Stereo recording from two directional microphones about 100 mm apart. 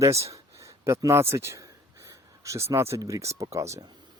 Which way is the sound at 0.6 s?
30° right (ahead or behind).